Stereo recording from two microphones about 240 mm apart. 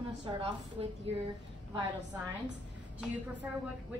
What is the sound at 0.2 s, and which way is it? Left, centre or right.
Speech, centre.